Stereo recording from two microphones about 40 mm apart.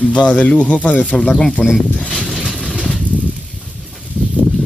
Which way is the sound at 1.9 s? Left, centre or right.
Centre.